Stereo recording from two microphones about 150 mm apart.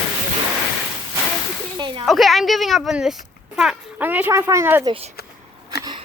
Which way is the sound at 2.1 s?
Centre (ahead or behind).